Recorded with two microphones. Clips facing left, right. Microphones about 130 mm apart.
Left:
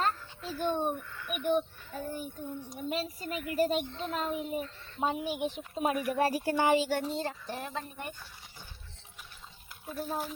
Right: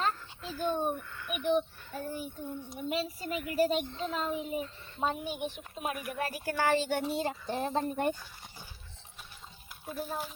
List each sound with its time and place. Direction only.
0.0 s a child's voice: centre (ahead or behind)
5.5 s speech: 30° left (ahead or behind)
6.7 s a child's voice: 5° left (ahead or behind)
7.0 s speech: 10° right (ahead or behind)
7.6 s speech: 35° right (ahead or behind)
9.9 s a child's voice: centre (ahead or behind)